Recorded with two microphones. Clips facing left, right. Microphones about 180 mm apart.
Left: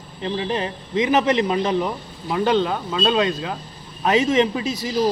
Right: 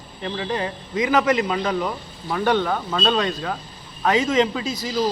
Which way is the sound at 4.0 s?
20° left (ahead or behind).